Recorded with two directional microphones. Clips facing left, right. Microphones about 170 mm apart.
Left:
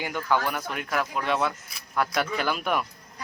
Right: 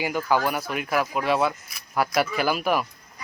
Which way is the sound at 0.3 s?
10° right (ahead or behind).